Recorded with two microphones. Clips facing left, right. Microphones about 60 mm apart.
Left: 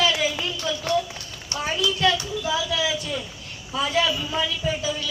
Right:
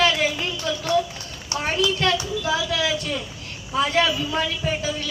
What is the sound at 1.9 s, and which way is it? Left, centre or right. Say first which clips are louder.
A man's voice: even; right.